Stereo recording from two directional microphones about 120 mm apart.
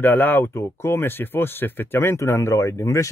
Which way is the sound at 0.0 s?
15° left (ahead or behind).